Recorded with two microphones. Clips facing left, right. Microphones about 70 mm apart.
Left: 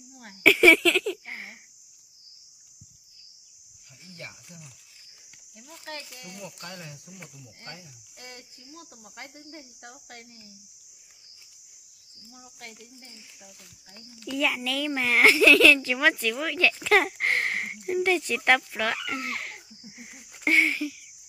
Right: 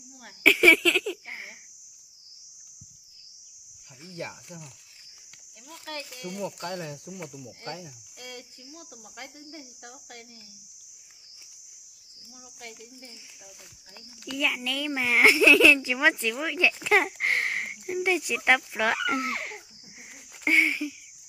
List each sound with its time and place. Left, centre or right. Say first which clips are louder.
0.4 s a sound: left 2 dB; centre
4.2 s speech: right 7 dB; right
6.7 s speech: right 8 dB; right
8.2 s cricket: right 3 dB; left
8.7 s speech: even; left
14.2 s a child's voice: left 2 dB; centre
18.8 s speech: right 4 dB; right
19.8 s a child's voice: left 3 dB; centre